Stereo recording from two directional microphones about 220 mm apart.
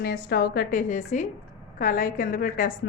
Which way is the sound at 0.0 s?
45° left (ahead or behind).